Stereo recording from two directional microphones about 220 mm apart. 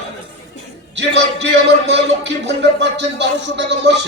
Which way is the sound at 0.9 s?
50° right (ahead or behind).